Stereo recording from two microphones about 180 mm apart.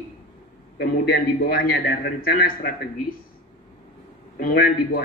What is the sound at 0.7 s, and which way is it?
A man's voice, 55° left (ahead or behind).